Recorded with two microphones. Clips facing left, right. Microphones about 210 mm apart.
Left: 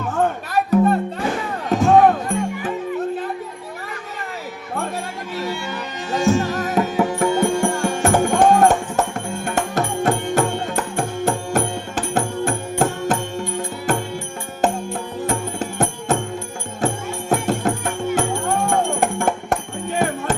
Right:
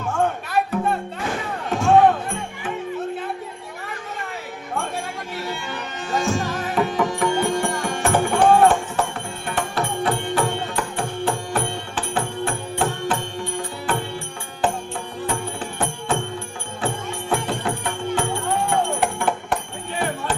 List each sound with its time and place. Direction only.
0.5 s music: 40° left (ahead or behind)
6.1 s music: 40° left (ahead or behind)
15.3 s music: 45° left (ahead or behind)